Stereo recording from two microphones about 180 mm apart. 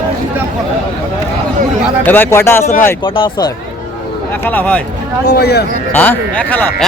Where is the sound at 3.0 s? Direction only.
25° left (ahead or behind).